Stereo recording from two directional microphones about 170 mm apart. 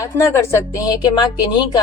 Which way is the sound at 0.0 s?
15° left (ahead or behind).